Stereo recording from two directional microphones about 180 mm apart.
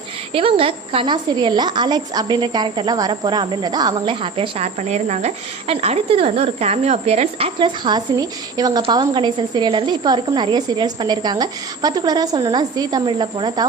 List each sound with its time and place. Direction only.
0.3 s a woman's voice: 30° right (ahead or behind)